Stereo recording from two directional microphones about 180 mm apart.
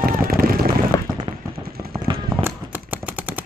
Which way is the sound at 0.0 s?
55° right (ahead or behind).